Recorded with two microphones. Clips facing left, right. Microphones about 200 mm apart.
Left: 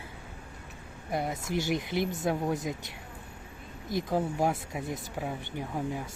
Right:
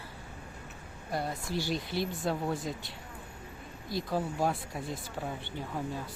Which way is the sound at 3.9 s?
20° left (ahead or behind).